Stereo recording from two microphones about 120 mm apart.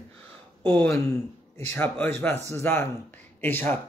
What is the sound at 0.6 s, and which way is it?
A man's voice, 20° left (ahead or behind).